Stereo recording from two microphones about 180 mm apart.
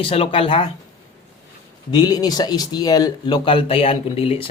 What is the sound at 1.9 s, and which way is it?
Speech, 25° left (ahead or behind).